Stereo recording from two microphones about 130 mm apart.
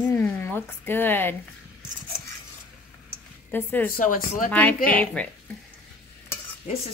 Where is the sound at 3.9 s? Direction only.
90° left.